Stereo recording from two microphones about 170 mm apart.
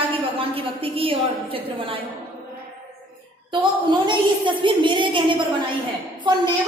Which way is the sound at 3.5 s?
25° right (ahead or behind).